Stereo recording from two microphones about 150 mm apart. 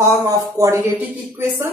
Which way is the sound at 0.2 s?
25° right (ahead or behind).